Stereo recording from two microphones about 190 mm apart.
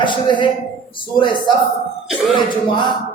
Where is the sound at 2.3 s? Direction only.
25° left (ahead or behind).